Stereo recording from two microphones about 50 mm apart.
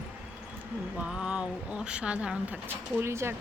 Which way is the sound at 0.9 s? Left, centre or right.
Centre.